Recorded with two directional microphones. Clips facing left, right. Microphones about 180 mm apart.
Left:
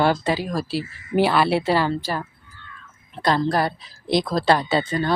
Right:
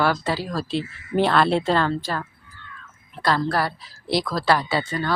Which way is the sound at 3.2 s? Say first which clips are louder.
Left 2 dB; 20° left (ahead or behind).